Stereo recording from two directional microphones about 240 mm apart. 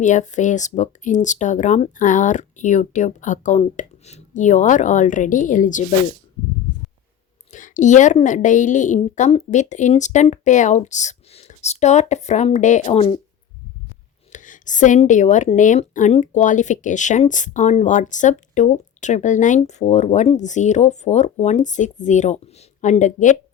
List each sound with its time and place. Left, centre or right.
0.0 s speech: left
7.5 s a woman's voice: left
14.3 s speech: left